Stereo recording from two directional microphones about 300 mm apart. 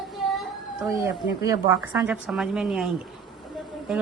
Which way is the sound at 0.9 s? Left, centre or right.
Centre.